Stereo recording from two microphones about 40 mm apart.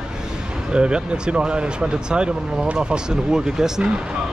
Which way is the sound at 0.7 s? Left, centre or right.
Right.